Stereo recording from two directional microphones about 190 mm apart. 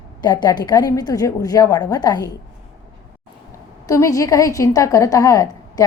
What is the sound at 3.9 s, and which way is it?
A woman's voice, 15° left (ahead or behind).